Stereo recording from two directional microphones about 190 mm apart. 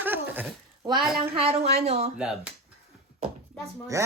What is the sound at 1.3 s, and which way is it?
Speech, 30° right (ahead or behind).